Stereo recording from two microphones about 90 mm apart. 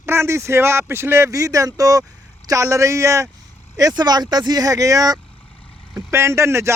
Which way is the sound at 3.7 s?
45° right (ahead or behind).